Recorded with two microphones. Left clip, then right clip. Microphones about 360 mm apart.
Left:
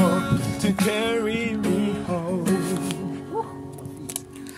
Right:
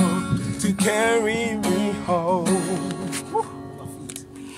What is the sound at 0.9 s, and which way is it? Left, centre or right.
Music, right.